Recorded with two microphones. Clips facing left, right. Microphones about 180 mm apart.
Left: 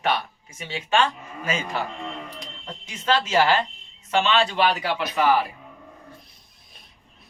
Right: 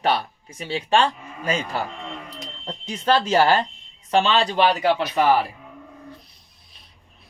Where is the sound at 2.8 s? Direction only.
35° right (ahead or behind).